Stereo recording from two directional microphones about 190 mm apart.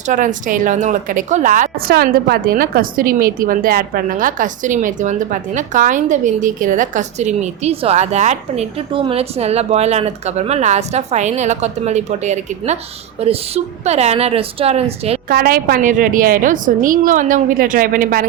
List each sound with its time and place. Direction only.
0.1 s a woman's voice: 45° right (ahead or behind)
15.3 s a woman's voice: 55° right (ahead or behind)